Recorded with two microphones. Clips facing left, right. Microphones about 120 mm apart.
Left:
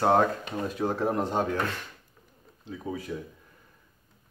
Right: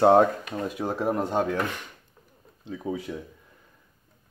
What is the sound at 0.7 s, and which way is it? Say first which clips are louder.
Speech: even; 10° right (ahead or behind).